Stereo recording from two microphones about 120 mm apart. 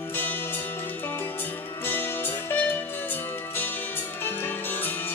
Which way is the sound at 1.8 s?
15° left (ahead or behind).